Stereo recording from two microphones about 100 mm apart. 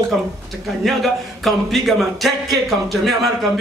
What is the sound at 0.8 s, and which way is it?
Speech, centre (ahead or behind).